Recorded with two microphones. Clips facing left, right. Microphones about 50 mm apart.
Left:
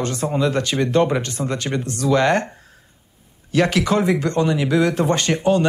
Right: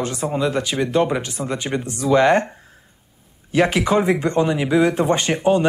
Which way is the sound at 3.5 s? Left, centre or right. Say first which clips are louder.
Right 1 dB; centre.